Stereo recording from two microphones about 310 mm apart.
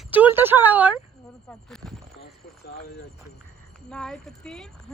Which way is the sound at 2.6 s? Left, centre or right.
Left.